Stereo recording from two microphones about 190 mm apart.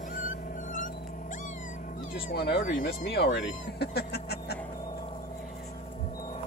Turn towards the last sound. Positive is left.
turn(degrees=60)  # may be behind; listen again after turning